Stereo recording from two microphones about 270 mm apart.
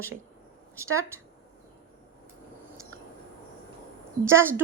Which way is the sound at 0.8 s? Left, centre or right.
Centre.